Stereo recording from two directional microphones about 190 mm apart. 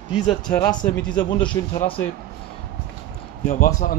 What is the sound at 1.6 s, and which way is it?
Speech, 20° left (ahead or behind).